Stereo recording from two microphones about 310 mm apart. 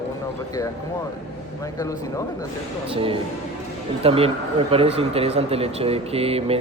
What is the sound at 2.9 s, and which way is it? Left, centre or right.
A man's voice, centre.